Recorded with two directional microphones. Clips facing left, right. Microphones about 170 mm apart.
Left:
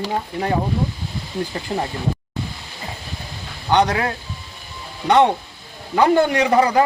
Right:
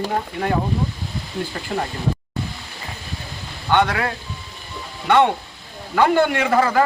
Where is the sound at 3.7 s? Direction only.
20° left (ahead or behind).